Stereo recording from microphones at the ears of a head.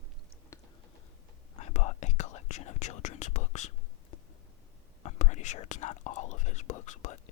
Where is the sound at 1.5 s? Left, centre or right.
Left.